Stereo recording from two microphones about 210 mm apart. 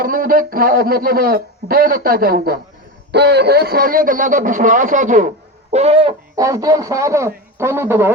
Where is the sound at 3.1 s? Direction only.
55° right (ahead or behind); by 6.1 s 30° right (ahead or behind).